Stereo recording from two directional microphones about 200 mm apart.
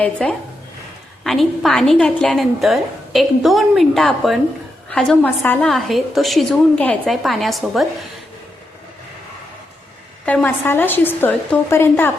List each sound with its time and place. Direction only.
0.0 s a woman's voice: 5° left (ahead or behind)
10.2 s a woman's voice: 10° left (ahead or behind)